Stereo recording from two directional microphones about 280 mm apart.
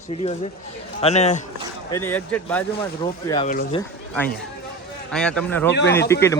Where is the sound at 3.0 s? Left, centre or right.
Centre.